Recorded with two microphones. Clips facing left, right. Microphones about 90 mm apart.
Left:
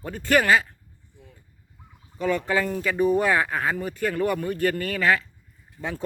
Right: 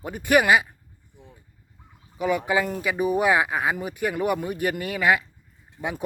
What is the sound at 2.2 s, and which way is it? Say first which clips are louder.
Speech: right 1 dB; 10° right (ahead or behind).